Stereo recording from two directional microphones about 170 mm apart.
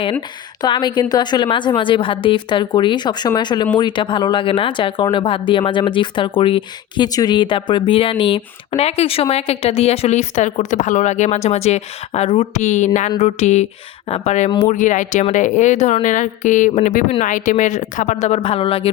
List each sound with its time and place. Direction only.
0.0 s a woman's voice: 30° left (ahead or behind)